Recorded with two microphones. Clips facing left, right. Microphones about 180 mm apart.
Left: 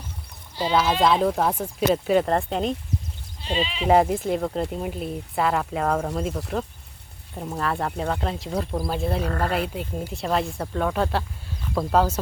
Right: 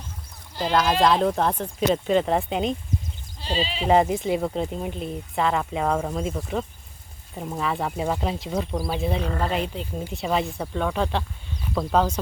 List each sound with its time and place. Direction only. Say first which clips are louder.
0.6 s speech: even; 5° left (ahead or behind)
3.4 s speech: even; 35° right (ahead or behind)
3.8 s speech: left 1 dB; centre (ahead or behind)